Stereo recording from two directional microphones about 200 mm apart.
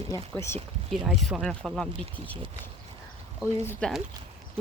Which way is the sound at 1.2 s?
Centre (ahead or behind).